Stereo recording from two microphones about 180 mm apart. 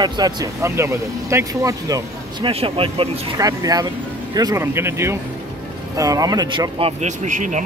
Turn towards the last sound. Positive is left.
turn(degrees=-45)  # may be behind; listen again after turning